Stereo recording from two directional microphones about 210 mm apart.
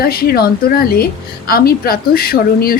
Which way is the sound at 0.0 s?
45° left (ahead or behind).